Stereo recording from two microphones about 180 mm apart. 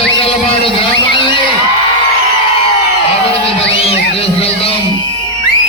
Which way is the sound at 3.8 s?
35° left (ahead or behind).